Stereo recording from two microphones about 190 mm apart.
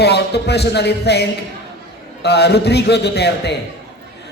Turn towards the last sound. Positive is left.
turn(degrees=60)  # may be behind; listen again after turning